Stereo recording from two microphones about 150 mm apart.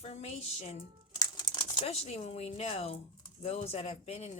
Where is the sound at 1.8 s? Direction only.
45° left (ahead or behind).